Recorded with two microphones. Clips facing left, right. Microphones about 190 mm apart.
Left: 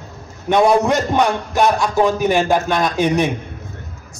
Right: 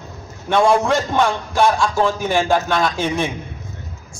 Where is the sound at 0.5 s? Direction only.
20° left (ahead or behind).